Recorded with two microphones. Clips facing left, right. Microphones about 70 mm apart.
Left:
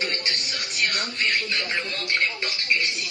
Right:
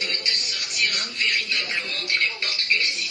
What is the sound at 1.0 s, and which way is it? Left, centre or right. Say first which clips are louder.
Television: left 1 dB; left.